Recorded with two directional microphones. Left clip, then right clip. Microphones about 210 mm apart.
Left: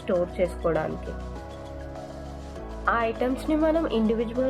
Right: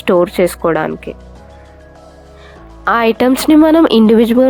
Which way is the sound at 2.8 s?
55° right (ahead or behind).